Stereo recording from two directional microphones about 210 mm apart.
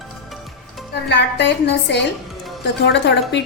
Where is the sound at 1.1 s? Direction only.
55° left (ahead or behind).